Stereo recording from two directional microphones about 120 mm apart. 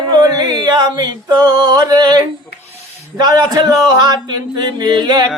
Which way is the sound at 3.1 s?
35° right (ahead or behind).